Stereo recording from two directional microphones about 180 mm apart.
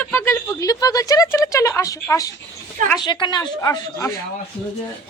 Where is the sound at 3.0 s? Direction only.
25° left (ahead or behind).